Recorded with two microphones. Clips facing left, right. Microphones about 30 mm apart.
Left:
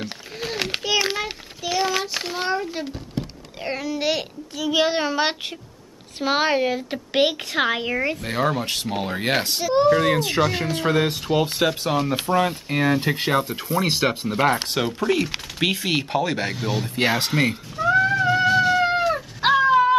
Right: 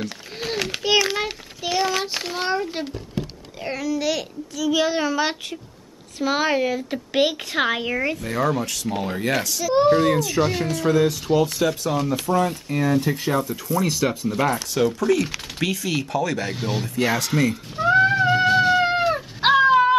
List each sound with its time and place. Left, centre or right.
0.7 s a sound: left
1.1 s a sound: centre
1.8 s child singing: centre
3.6 s a child's voice: left
7.5 s a woman's voice: centre
8.2 s a child's voice: left
8.8 s speech: centre
9.2 s speech: left
9.8 s a woman's voice: centre
10.0 s a child's voice: left
16.5 s a woman's voice: centre
16.8 s speech: left
17.3 s a woman's voice: centre
17.7 s cat: centre